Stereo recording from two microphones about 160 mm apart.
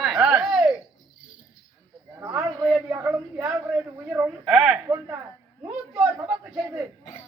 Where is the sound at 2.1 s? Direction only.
20° right (ahead or behind).